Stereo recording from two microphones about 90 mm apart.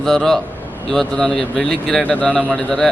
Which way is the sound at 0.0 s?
5° left (ahead or behind).